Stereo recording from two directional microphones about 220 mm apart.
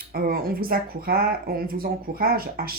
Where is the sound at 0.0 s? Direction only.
40° right (ahead or behind).